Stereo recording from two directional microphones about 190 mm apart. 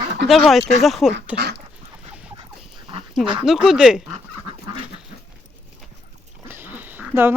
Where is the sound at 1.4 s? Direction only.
60° right (ahead or behind).